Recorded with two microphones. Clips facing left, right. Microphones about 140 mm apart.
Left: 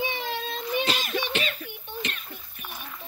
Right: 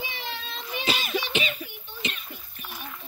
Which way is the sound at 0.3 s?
45° left (ahead or behind).